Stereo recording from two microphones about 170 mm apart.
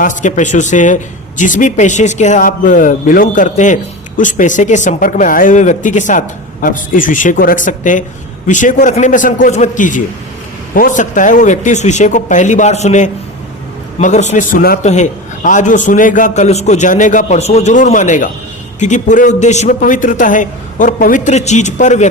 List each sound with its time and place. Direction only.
0.0 s speech: 45° left (ahead or behind)
14.8 s speech: 45° left (ahead or behind)